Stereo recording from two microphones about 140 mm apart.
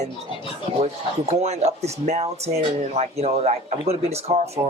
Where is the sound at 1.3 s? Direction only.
50° right (ahead or behind).